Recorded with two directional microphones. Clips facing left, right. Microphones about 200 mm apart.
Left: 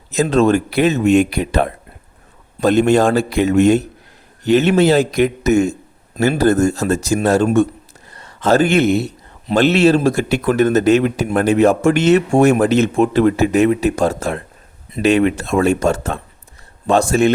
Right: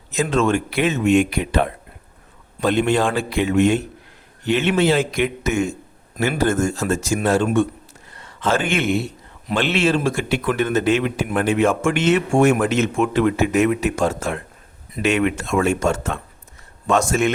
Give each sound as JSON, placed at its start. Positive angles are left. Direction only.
{"t": 0.1, "sound": "speech", "side_deg": 35}